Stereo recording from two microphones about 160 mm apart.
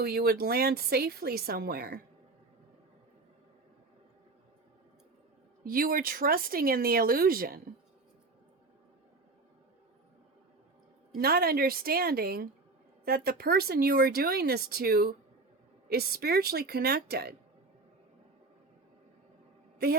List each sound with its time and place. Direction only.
0.0 s speech: 75° right (ahead or behind)
5.6 s speech: 65° right (ahead or behind)
11.2 s speech: 70° right (ahead or behind)